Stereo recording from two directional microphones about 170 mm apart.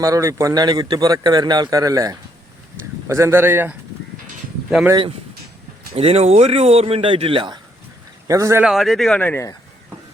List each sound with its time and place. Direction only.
0.0 s speech: 20° right (ahead or behind)
5.9 s speech: 35° right (ahead or behind)
8.3 s speech: 20° right (ahead or behind)
8.6 s speech: centre (ahead or behind); by 9.6 s 15° left (ahead or behind)